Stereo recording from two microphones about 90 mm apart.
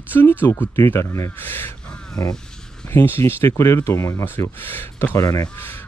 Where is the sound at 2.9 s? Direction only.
25° left (ahead or behind).